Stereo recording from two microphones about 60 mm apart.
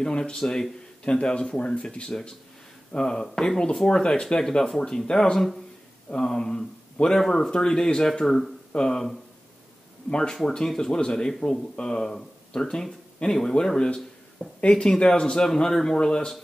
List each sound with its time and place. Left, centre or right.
0.0 s speech: centre